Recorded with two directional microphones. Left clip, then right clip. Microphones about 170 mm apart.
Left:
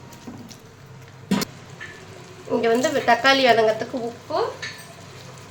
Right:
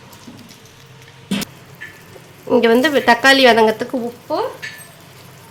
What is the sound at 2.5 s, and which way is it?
Speech, 90° right.